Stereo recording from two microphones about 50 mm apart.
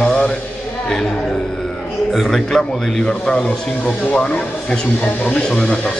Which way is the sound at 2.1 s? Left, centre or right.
Centre.